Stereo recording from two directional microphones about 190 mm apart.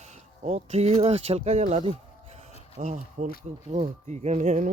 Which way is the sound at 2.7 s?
40° right (ahead or behind).